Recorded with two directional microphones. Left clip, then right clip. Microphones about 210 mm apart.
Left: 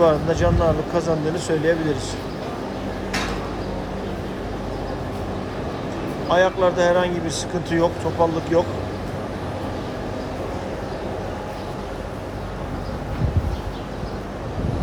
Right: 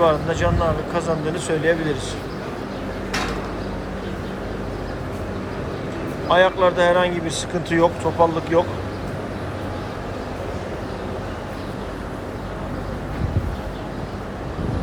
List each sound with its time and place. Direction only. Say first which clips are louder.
0.0 s speech: left 1 dB; 20° left (ahead or behind)
6.2 s speech: right 2 dB; 15° left (ahead or behind)